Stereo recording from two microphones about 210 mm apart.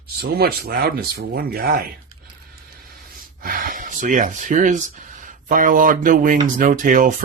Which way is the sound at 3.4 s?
40° right (ahead or behind).